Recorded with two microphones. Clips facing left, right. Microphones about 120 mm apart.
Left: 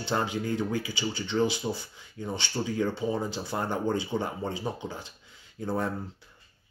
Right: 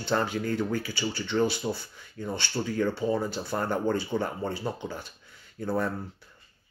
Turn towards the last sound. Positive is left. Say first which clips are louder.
# right 1 dB
turn(degrees=20)  # may be behind; listen again after turning